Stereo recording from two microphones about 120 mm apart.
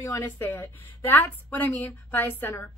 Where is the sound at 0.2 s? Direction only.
20° left (ahead or behind).